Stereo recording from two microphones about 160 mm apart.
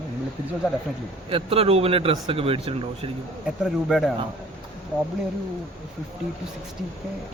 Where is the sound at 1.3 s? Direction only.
35° right (ahead or behind).